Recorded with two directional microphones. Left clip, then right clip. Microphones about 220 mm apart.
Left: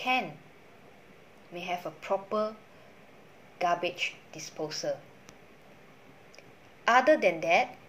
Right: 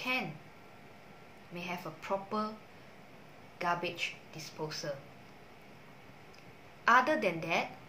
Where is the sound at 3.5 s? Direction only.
5° right (ahead or behind).